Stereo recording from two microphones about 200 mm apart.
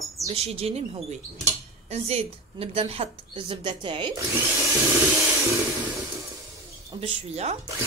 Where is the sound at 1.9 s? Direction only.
30° right (ahead or behind).